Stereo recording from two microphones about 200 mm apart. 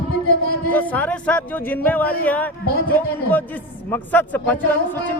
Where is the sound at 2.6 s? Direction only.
50° left (ahead or behind).